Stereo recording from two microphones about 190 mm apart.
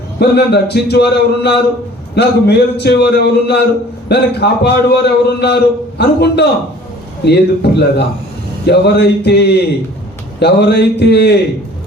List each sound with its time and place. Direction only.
0.2 s a man's voice: 60° left (ahead or behind)